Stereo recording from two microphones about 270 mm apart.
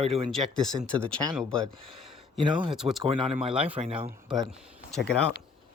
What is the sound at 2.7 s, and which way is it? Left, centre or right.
Speech, centre.